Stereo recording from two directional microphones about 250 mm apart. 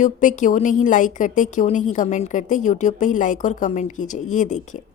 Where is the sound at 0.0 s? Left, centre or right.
Left.